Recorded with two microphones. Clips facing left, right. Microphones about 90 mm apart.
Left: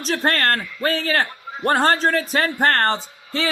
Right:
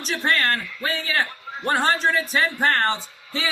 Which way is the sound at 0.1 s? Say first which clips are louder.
Left 3 dB; 45° left (ahead or behind).